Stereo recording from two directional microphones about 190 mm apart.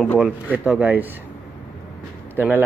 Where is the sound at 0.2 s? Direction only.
5° right (ahead or behind).